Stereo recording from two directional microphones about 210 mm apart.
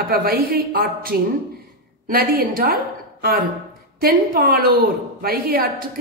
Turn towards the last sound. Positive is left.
turn(degrees=-45)  # may be behind; listen again after turning